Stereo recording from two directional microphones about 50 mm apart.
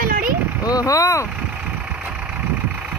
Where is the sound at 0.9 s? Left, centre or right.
Left.